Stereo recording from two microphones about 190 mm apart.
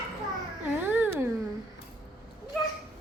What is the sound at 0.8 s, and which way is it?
Cat, 10° right (ahead or behind).